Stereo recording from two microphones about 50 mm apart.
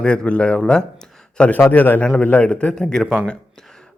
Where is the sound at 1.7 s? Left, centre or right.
Left.